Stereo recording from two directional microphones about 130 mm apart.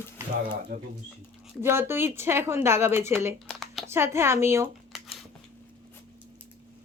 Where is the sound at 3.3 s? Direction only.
Centre (ahead or behind).